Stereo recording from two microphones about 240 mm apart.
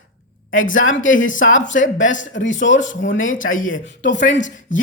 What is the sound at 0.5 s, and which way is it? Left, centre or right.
Speech, left.